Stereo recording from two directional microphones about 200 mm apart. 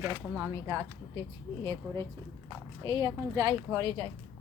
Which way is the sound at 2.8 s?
15° right (ahead or behind).